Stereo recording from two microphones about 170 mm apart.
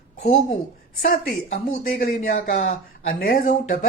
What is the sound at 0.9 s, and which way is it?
A woman's voice, 55° left (ahead or behind).